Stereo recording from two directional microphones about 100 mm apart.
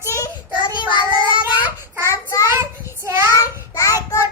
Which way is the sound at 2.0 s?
30° left (ahead or behind).